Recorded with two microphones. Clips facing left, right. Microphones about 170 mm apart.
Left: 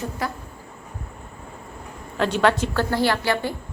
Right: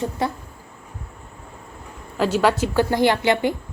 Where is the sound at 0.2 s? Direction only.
25° right (ahead or behind).